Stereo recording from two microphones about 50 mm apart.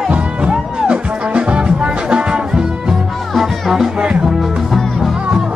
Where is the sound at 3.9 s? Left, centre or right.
Centre.